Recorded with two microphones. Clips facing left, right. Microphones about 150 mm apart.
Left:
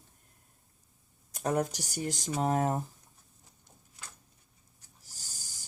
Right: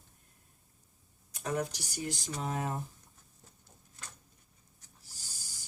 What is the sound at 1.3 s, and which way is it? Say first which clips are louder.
Speech: left 4 dB; 45° left (ahead or behind).